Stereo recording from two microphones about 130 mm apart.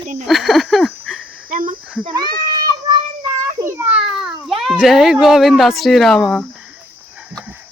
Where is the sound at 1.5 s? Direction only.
90° right.